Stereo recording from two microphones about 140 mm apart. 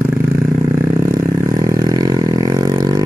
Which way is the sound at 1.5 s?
30° right (ahead or behind).